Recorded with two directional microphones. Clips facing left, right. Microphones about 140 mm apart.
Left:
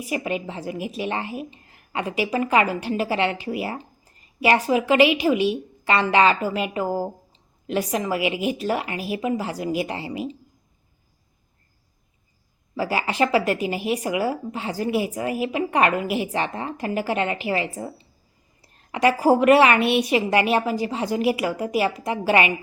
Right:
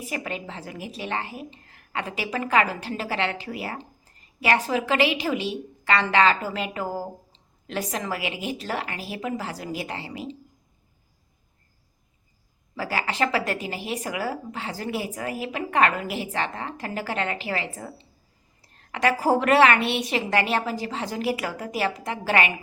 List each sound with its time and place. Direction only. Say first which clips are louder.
0.0 s speech: left 5 dB; 15° left (ahead or behind)
12.7 s speech: left 4 dB; 20° left (ahead or behind)